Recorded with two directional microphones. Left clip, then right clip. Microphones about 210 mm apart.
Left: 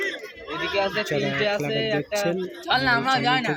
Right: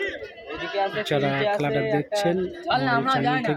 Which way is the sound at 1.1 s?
10° right (ahead or behind).